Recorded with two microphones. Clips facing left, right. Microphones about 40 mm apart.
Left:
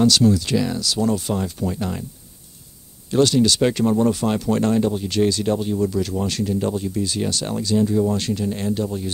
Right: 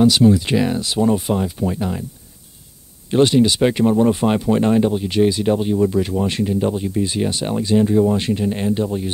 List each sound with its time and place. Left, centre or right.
0.0 s speech: right
3.1 s speech: right